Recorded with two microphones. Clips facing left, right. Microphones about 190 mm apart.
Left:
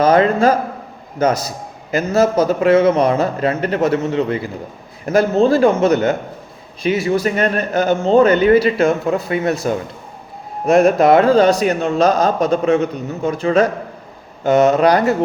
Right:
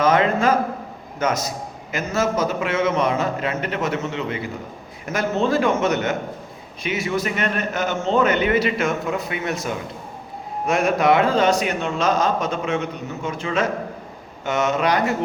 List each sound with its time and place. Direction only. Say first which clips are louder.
0.0 s a man's voice: left 5 dB; 35° left (ahead or behind)